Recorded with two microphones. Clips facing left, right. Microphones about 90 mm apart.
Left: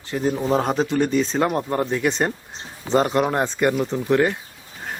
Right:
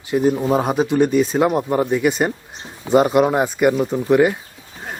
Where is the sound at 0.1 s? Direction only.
10° right (ahead or behind).